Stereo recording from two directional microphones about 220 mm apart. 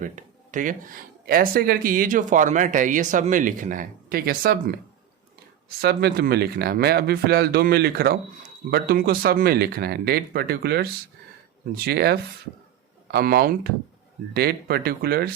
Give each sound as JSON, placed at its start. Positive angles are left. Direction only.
{"t": 0.0, "sound": "speech", "side_deg": -35}
{"t": 5.8, "sound": "speech", "side_deg": -45}